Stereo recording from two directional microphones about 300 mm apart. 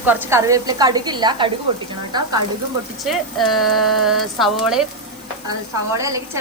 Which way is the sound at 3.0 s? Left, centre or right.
Centre.